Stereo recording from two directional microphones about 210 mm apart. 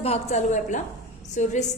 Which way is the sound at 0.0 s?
30° left (ahead or behind).